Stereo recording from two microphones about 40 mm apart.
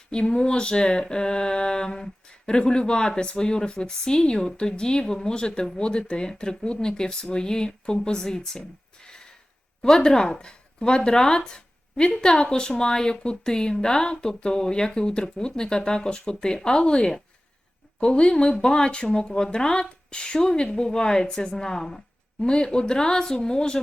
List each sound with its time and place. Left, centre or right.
0.1 s speech: left